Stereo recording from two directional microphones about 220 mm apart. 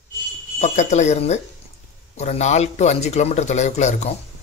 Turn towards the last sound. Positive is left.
turn(degrees=30)  # may be behind; listen again after turning